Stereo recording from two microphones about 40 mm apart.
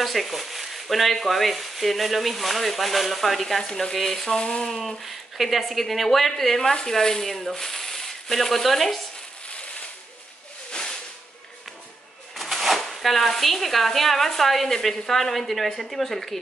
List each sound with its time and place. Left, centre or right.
0.0 s speech: centre
4.8 s speech: centre
10.8 s a sound: left
12.4 s speech: centre